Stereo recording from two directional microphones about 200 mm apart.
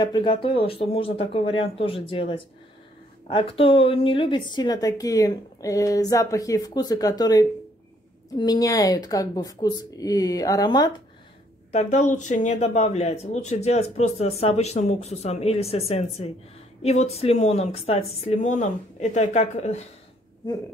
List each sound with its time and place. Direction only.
0.0 s a woman's voice: 25° left (ahead or behind)
11.7 s speech: 35° left (ahead or behind)